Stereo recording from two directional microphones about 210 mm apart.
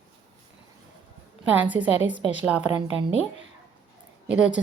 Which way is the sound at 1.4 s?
5° right (ahead or behind).